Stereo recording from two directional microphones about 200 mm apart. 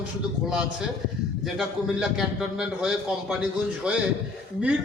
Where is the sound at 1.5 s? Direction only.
Centre (ahead or behind).